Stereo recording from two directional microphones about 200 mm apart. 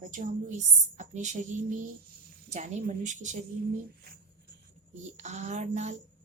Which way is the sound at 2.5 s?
35° right (ahead or behind).